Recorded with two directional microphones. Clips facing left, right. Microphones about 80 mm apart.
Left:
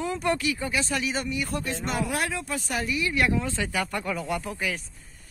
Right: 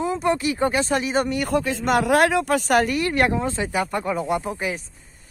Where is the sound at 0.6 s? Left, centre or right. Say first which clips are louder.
Right 7 dB; right.